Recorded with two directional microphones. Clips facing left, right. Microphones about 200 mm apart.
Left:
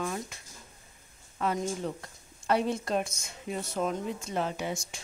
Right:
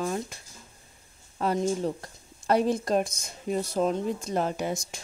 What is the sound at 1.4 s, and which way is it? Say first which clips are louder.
Speech: right 5 dB; 35° right (ahead or behind).